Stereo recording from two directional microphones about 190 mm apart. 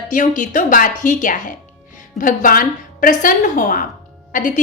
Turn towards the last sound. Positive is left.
turn(degrees=45)  # may be behind; listen again after turning